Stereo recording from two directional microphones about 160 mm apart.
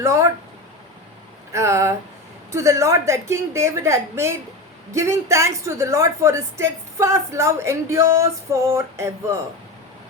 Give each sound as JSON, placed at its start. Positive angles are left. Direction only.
{"t": 0.0, "sound": "speech", "side_deg": -20}
{"t": 1.5, "sound": "speech", "side_deg": -20}